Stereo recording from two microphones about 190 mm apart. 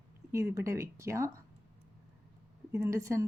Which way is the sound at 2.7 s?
15° right (ahead or behind).